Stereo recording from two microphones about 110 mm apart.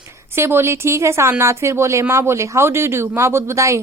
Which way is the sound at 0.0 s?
25° right (ahead or behind).